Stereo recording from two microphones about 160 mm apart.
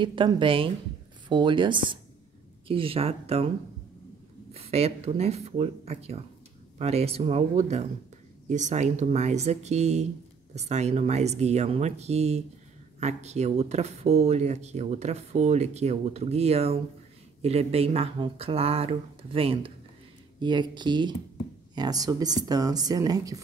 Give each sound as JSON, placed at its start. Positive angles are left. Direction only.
{"t": 0.0, "sound": "speech", "side_deg": -30}
{"t": 4.6, "sound": "speech", "side_deg": -40}